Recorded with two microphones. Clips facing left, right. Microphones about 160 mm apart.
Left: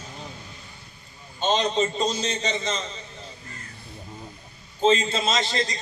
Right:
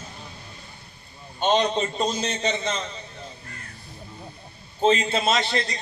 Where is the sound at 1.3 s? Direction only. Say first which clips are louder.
Right 1 dB; 60° right (ahead or behind).